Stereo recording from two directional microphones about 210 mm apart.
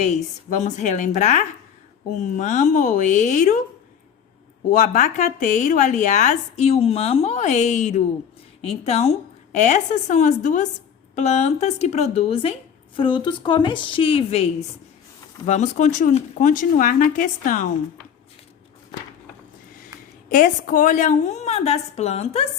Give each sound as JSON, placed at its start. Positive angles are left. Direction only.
{"t": 0.0, "sound": "speech", "side_deg": 35}
{"t": 4.7, "sound": "a woman's voice", "side_deg": 35}
{"t": 20.3, "sound": "speech", "side_deg": 40}